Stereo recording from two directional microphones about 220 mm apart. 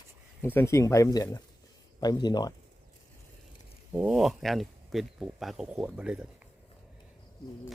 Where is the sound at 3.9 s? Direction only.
5° right (ahead or behind).